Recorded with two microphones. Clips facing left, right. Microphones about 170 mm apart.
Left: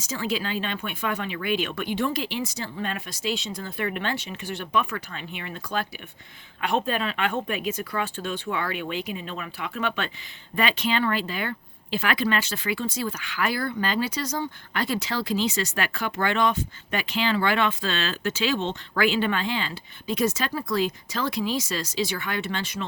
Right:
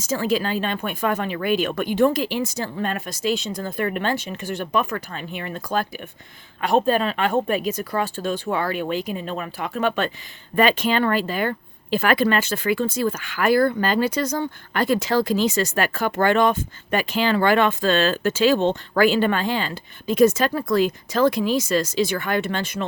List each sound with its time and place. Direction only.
0.0 s speech: 45° right (ahead or behind)